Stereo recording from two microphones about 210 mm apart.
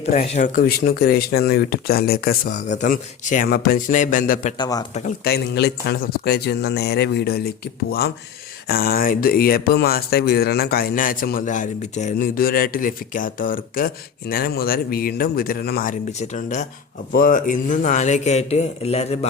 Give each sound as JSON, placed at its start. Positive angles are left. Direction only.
{"t": 0.0, "sound": "speech", "side_deg": 35}
{"t": 4.5, "sound": "speech", "side_deg": 20}
{"t": 4.9, "sound": "speech", "side_deg": 40}